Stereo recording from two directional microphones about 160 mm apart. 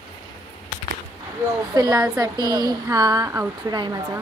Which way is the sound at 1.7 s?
25° right (ahead or behind).